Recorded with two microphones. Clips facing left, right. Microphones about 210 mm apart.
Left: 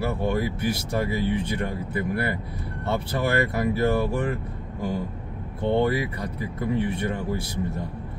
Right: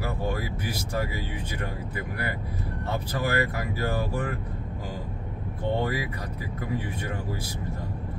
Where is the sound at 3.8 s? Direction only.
25° left (ahead or behind).